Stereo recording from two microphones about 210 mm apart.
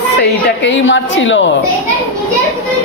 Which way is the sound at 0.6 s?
60° left (ahead or behind).